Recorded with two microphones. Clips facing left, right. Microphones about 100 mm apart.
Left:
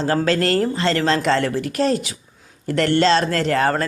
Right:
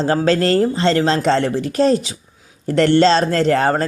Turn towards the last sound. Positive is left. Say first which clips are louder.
# right 3 dB
turn(degrees=-30)  # may be behind; listen again after turning